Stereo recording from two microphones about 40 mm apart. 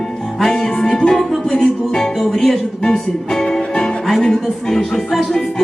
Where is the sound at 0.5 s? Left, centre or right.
Centre.